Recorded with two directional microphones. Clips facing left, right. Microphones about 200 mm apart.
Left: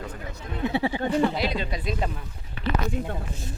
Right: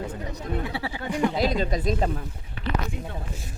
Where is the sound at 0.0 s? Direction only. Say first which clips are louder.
Right 4 dB; 30° right (ahead or behind).